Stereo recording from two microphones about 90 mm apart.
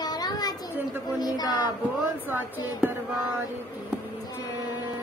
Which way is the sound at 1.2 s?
45° left (ahead or behind).